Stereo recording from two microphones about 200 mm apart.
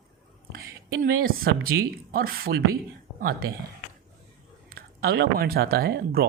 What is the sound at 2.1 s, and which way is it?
Speech, 50° right (ahead or behind).